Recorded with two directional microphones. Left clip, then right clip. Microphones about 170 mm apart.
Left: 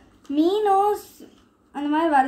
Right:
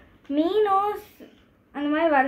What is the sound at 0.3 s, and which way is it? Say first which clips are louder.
A woman's voice: left 2 dB; 25° right (ahead or behind).